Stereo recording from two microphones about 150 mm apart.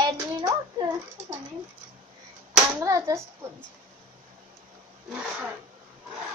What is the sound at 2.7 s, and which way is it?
Speech, 20° right (ahead or behind).